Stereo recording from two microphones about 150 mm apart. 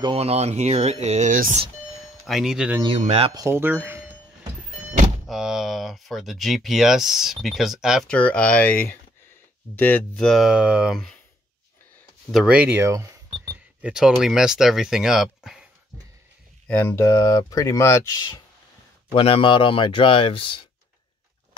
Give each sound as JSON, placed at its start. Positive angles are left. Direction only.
{"t": 0.0, "sound": "speech", "side_deg": -40}
{"t": 2.2, "sound": "speech", "side_deg": 0}
{"t": 3.0, "sound": "speech", "side_deg": -45}
{"t": 3.3, "sound": "speech", "side_deg": -15}
{"t": 5.3, "sound": "speech", "side_deg": 0}
{"t": 8.1, "sound": "speech", "side_deg": 10}
{"t": 12.3, "sound": "speech", "side_deg": -5}
{"t": 13.7, "sound": "speech", "side_deg": -5}
{"t": 16.6, "sound": "speech", "side_deg": 15}
{"t": 19.1, "sound": "speech", "side_deg": 35}